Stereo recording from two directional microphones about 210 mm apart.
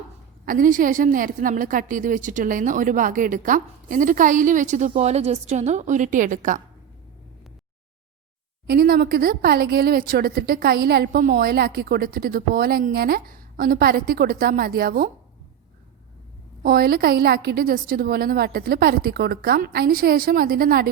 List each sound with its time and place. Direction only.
0.4 s a woman's voice: 40° right (ahead or behind)
8.6 s a woman's voice: 50° right (ahead or behind)
16.6 s a woman's voice: 45° right (ahead or behind)